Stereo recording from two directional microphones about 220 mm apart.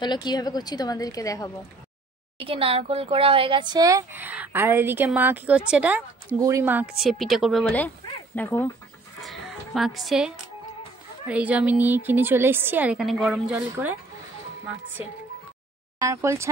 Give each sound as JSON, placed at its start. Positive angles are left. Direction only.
{"t": 0.0, "sound": "a woman's voice", "side_deg": 20}
{"t": 2.3, "sound": "a woman's voice", "side_deg": -25}
{"t": 16.0, "sound": "speech", "side_deg": -15}